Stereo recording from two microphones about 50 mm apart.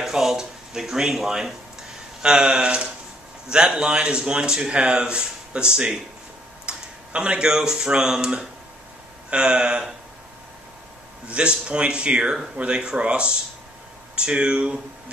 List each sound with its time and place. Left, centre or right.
0.0 s speech: centre
11.2 s speech: right